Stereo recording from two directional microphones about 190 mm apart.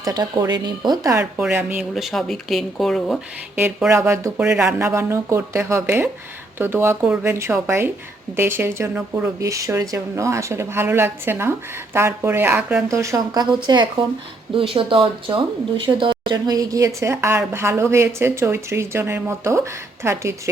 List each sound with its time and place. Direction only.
0.0 s a woman's voice: 20° right (ahead or behind)